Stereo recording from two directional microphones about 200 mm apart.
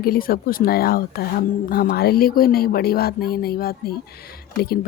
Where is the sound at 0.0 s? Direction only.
50° left (ahead or behind).